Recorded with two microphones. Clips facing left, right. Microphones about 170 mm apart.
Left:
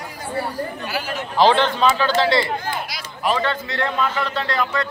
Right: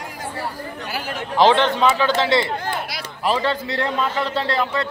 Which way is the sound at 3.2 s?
30° right (ahead or behind).